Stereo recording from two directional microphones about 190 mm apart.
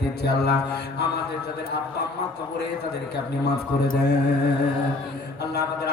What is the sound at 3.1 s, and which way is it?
A man's voice, 60° left (ahead or behind).